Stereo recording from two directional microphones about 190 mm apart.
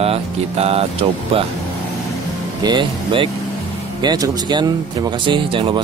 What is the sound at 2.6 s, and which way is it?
Speech, 25° right (ahead or behind).